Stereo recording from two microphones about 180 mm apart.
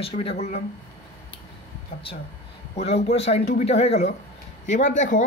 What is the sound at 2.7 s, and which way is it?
Speech, 35° left (ahead or behind).